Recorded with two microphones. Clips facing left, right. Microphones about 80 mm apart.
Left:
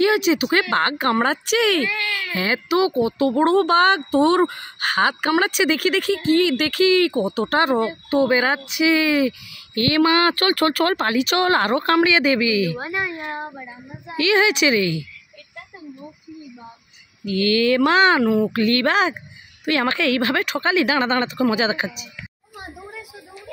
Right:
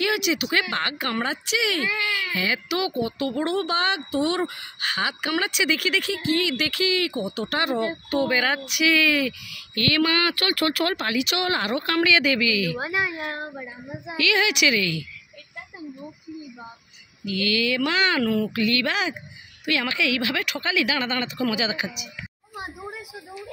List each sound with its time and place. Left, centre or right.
0.0 s speech: left
1.9 s baby cry: centre
2.3 s speech: left
3.6 s a woman's voice: left
12.1 s speech: left
12.7 s a child's voice: centre
14.1 s speech: left
17.2 s speech: left
18.2 s speech: left
18.5 s a woman's voice: left